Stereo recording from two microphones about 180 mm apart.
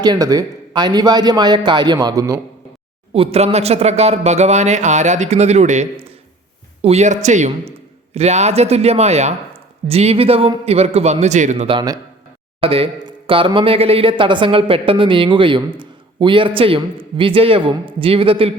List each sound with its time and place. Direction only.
0.0 s speech: 20° right (ahead or behind)
3.1 s speech: 35° right (ahead or behind)